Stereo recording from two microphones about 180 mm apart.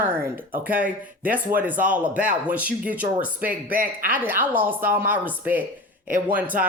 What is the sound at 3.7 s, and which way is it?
Speech, 50° right (ahead or behind).